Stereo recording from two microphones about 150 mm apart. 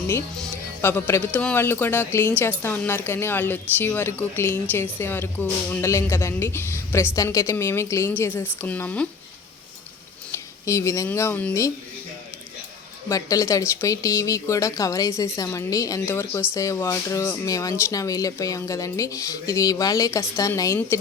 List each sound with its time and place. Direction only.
0.8 s a woman's voice: 15° left (ahead or behind)
10.7 s speech: 20° left (ahead or behind)
13.1 s speech: 25° left (ahead or behind)